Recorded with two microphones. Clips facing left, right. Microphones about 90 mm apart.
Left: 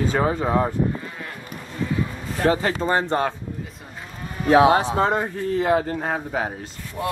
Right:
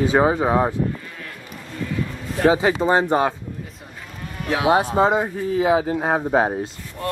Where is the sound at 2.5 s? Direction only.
10° right (ahead or behind).